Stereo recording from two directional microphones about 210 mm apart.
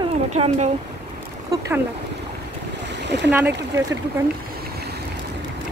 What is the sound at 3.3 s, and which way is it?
Speech, 10° right (ahead or behind).